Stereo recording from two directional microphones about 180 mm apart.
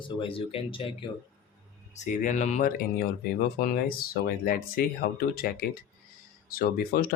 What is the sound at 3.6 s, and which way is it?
Speech, 55° left (ahead or behind).